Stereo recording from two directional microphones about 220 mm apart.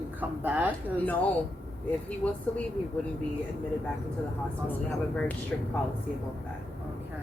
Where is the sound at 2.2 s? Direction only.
5° left (ahead or behind).